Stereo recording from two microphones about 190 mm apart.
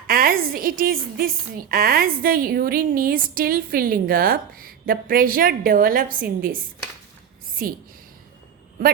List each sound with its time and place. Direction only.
0.1 s a woman's voice: 50° right (ahead or behind)
7.6 s a woman's voice: 50° right (ahead or behind)